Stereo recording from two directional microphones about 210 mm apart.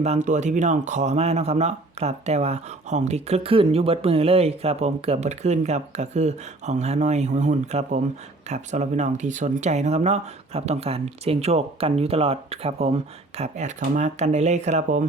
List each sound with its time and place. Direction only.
0.0 s speech: 35° right (ahead or behind)